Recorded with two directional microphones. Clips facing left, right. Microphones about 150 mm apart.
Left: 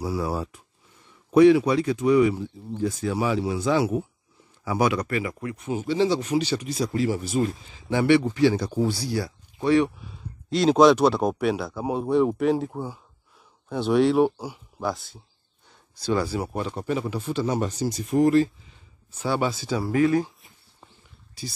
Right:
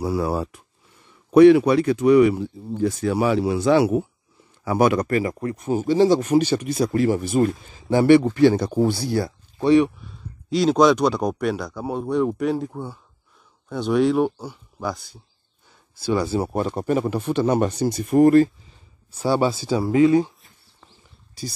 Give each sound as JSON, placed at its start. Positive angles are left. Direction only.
{"t": 0.0, "sound": "speech", "side_deg": -60}
{"t": 4.6, "sound": "speech", "side_deg": -55}
{"t": 9.6, "sound": "speech", "side_deg": -20}
{"t": 9.8, "sound": "speech", "side_deg": 0}
{"t": 16.0, "sound": "speech", "side_deg": -15}
{"t": 16.6, "sound": "speech", "side_deg": -50}
{"t": 19.1, "sound": "speech", "side_deg": -30}